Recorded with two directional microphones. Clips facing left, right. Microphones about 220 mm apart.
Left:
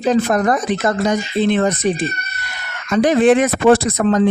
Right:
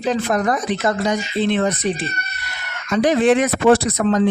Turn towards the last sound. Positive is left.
turn(degrees=50)  # may be behind; listen again after turning